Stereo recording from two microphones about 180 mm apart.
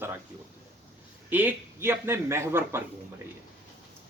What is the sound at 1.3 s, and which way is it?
Speech, 10° right (ahead or behind).